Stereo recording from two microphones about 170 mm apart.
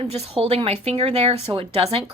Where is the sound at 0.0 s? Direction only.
35° right (ahead or behind).